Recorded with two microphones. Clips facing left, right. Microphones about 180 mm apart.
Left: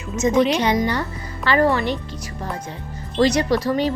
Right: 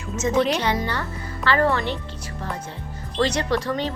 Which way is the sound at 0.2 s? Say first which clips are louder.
Left 4 dB; 15° left (ahead or behind).